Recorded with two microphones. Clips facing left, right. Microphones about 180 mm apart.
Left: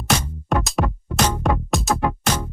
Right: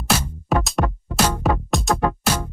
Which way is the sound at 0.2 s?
5° right (ahead or behind).